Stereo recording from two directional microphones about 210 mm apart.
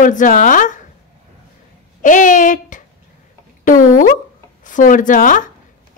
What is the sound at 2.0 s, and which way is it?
Speech, 40° left (ahead or behind).